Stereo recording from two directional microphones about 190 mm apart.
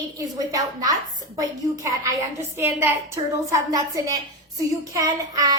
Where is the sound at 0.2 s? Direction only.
20° right (ahead or behind).